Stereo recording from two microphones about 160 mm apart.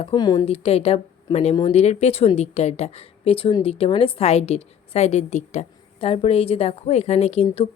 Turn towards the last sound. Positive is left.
turn(degrees=40)  # may be behind; listen again after turning